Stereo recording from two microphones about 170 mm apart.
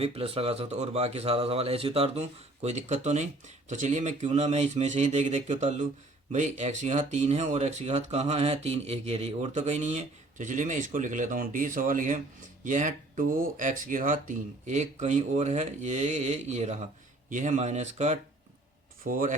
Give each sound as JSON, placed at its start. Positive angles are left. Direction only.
{"t": 0.0, "sound": "speech", "side_deg": -35}
{"t": 19.0, "sound": "speech", "side_deg": -50}